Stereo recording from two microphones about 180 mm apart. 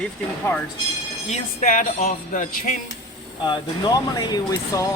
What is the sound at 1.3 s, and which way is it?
Speech, 45° left (ahead or behind).